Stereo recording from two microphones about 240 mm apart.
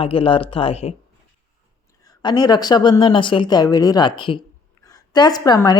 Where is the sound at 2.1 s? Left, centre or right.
Centre.